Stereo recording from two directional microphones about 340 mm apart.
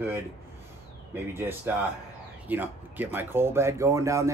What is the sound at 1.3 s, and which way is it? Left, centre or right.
Speech, centre.